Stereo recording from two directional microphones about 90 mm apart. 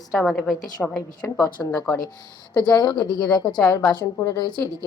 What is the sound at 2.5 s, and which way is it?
Speech, 50° left (ahead or behind).